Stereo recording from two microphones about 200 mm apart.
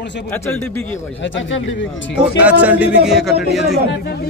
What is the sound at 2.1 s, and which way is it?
Speech, 5° right (ahead or behind).